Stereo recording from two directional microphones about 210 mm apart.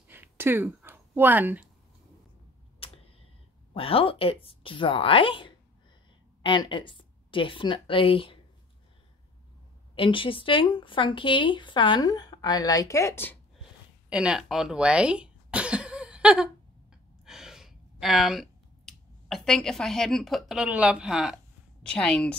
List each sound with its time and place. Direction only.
0.1 s a sound: 10° right (ahead or behind)
2.8 s tick-tock: 25° left (ahead or behind)
3.7 s speech: 25° left (ahead or behind)
9.9 s speech: 25° left (ahead or behind)
14.0 s cough: 5° right (ahead or behind)
16.9 s gasp: centre (ahead or behind)
21.8 s speech: 5° left (ahead or behind)